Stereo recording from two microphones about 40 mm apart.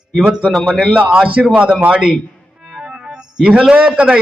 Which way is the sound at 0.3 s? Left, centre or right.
Right.